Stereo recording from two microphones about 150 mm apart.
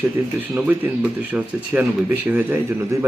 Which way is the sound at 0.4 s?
10° right (ahead or behind).